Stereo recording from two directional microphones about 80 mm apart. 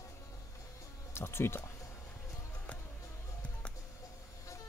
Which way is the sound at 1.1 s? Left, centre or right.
Left.